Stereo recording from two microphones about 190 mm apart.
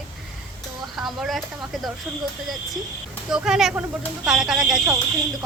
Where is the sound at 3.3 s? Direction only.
5° right (ahead or behind).